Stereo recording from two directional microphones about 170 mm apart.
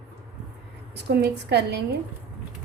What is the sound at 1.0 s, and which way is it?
Speech, 80° right.